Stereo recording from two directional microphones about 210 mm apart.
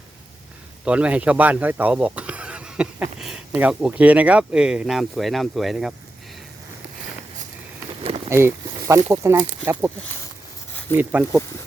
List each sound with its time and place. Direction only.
0.9 s speech: 5° right (ahead or behind)
8.0 s a sound: 25° right (ahead or behind)
8.3 s speech: 10° right (ahead or behind)
10.9 s speech: 10° right (ahead or behind)